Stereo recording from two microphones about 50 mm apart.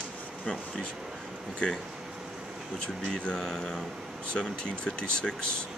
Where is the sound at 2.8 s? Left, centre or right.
Centre.